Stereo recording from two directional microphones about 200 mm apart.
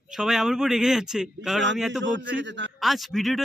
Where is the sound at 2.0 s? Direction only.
65° right (ahead or behind).